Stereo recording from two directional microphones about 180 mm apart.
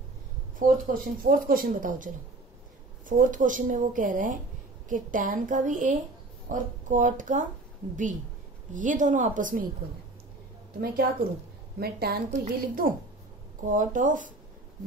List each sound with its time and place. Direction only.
0.6 s speech: 50° right (ahead or behind)
3.1 s speech: 45° right (ahead or behind)
11.8 s a woman's voice: 60° right (ahead or behind)